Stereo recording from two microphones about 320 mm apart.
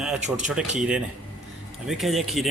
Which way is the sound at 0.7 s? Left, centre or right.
Centre.